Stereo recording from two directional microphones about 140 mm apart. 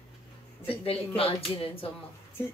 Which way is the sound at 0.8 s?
45° left (ahead or behind).